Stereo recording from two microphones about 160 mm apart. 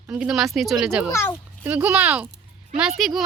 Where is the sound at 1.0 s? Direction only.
15° left (ahead or behind).